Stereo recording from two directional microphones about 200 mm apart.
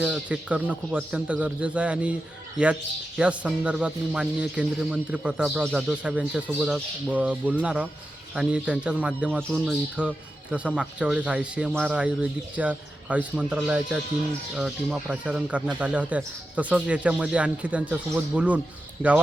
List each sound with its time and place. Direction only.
0.0 s a man's voice: 5° right (ahead or behind)
3.2 s a man's voice: 5° right (ahead or behind)